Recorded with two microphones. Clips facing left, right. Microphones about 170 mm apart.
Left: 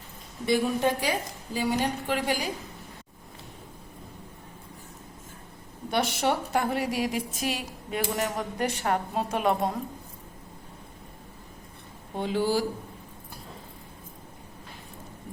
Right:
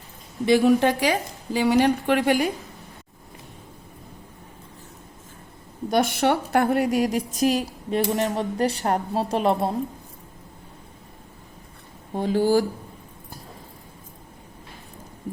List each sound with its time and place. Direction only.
0.4 s a woman's voice: 90° right
1.5 s a woman's voice: 75° right (ahead or behind)
5.9 s a woman's voice: 55° right (ahead or behind); by 9.7 s 30° right (ahead or behind)
12.2 s speech: 45° right (ahead or behind)